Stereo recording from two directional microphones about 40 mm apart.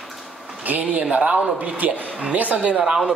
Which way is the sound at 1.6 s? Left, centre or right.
Right.